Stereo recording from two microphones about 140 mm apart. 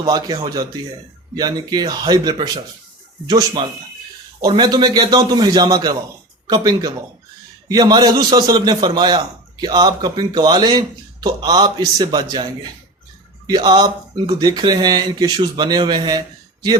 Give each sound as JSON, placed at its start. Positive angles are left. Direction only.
{"t": 0.0, "sound": "a man's voice", "side_deg": -30}
{"t": 13.5, "sound": "a man's voice", "side_deg": -30}